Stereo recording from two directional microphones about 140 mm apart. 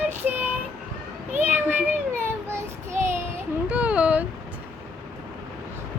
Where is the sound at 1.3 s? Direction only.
15° right (ahead or behind).